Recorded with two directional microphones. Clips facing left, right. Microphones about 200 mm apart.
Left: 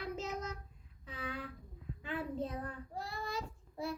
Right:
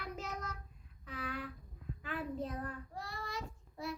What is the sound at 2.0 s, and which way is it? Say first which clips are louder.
Child singing: left 1 dB; 25° left (ahead or behind).